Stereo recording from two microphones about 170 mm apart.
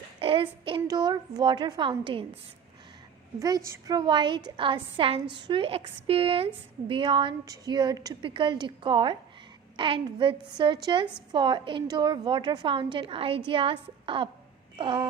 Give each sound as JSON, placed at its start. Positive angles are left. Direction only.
{"t": 0.2, "sound": "a woman's voice", "side_deg": -30}
{"t": 3.4, "sound": "a woman's voice", "side_deg": -20}